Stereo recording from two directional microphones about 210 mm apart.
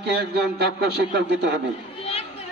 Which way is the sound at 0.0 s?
50° right (ahead or behind).